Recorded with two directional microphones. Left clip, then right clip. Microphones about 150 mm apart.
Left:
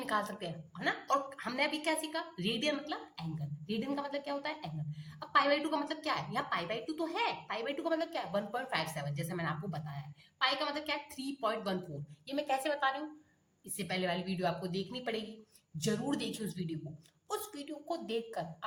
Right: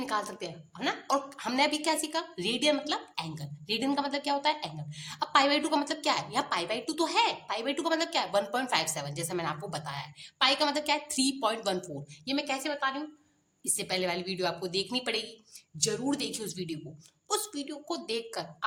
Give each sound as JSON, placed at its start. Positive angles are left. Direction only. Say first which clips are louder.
{"t": 0.0, "sound": "a woman's voice", "louder": "right 3 dB", "side_deg": -15}
{"t": 12.2, "sound": "a woman's voice", "louder": "right 2 dB", "side_deg": -20}
{"t": 13.7, "sound": "a woman's voice", "louder": "right 4 dB", "side_deg": -30}
{"t": 15.8, "sound": "a woman's voice", "louder": "right 5 dB", "side_deg": -20}